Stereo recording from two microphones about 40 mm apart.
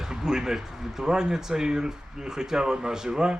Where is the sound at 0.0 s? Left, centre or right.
Centre.